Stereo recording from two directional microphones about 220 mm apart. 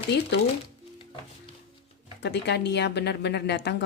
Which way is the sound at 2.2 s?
50° left (ahead or behind).